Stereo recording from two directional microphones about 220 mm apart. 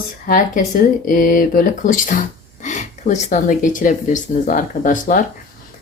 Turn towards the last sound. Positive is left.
turn(degrees=40)  # may be behind; listen again after turning